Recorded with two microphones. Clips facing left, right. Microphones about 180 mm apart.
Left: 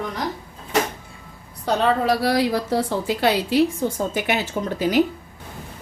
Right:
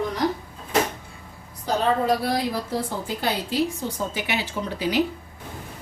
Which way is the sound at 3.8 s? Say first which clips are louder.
Left 5 dB; 50° left (ahead or behind).